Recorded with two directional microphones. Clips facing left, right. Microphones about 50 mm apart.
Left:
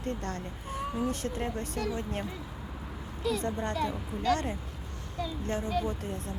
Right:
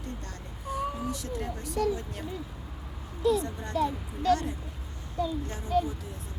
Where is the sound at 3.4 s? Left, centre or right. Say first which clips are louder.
Right 1 dB; left.